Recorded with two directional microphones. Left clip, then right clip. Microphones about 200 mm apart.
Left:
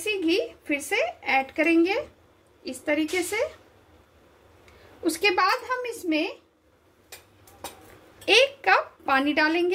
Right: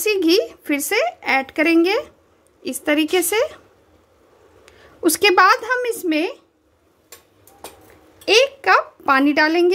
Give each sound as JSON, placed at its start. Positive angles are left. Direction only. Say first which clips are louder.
{"t": 0.0, "sound": "a woman's voice", "louder": "right 8 dB", "side_deg": -50}
{"t": 2.6, "sound": "a woman's voice", "louder": "right 7 dB", "side_deg": -60}
{"t": 5.0, "sound": "a woman's voice", "louder": "right 9 dB", "side_deg": -65}
{"t": 8.3, "sound": "speech", "louder": "right 5 dB", "side_deg": -35}